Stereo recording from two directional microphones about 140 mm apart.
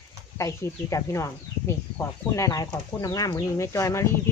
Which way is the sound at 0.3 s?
20° left (ahead or behind).